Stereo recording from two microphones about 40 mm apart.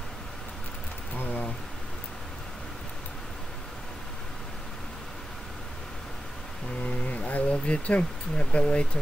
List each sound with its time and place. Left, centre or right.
1.1 s speech: left
6.8 s a sound: left
7.5 s speech: left